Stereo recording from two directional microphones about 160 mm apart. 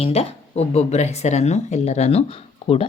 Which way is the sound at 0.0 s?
40° left (ahead or behind).